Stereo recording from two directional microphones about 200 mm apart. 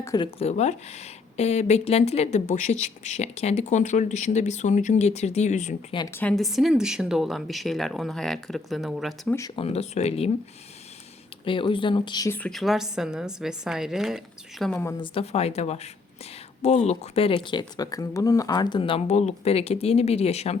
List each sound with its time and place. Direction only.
0.0 s speech: 15° left (ahead or behind)
0.3 s a woman's voice: 35° left (ahead or behind)
6.1 s speech: 5° left (ahead or behind)
9.6 s a woman's voice: 30° left (ahead or behind)
11.4 s speech: 25° left (ahead or behind); by 14.8 s 5° left (ahead or behind)
14.8 s a woman's voice: 20° left (ahead or behind)